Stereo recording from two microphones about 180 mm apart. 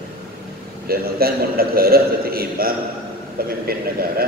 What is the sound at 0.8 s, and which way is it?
A man's voice, 55° right (ahead or behind).